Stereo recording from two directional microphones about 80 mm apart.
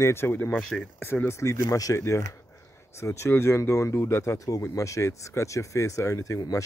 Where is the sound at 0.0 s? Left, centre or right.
Left.